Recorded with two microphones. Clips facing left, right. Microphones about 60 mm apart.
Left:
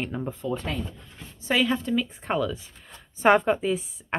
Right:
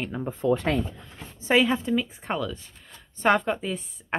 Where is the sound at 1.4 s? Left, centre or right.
Right.